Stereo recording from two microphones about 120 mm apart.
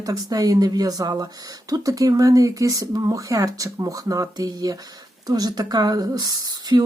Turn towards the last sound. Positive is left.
turn(degrees=-30)  # may be behind; listen again after turning